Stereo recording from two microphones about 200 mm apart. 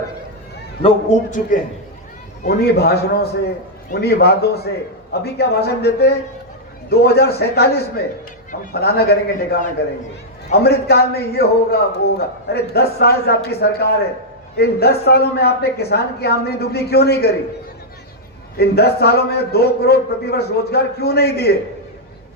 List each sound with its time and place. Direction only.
0.8 s a man's voice: 35° left (ahead or behind)
2.5 s a man's voice: 50° left (ahead or behind)
18.5 s a man's voice: 50° left (ahead or behind)